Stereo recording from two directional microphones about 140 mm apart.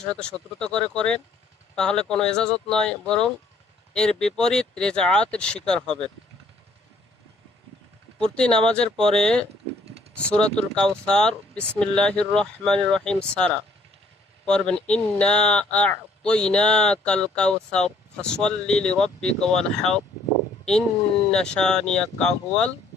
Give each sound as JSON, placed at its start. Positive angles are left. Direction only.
{"t": 0.0, "sound": "speech", "side_deg": 5}
{"t": 8.2, "sound": "speech", "side_deg": 5}
{"t": 21.2, "sound": "speech", "side_deg": 5}